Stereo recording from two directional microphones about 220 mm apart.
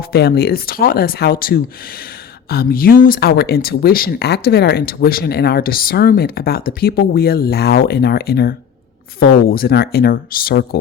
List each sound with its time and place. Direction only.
0.1 s speech: 45° left (ahead or behind)